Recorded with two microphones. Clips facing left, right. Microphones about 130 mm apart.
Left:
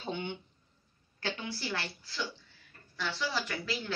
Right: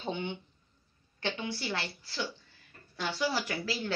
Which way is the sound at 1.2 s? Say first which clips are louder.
Right 2 dB; 30° right (ahead or behind).